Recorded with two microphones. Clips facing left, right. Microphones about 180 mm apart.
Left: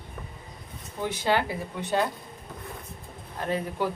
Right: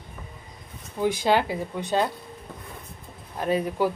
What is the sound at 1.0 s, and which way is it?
Speech, 10° right (ahead or behind).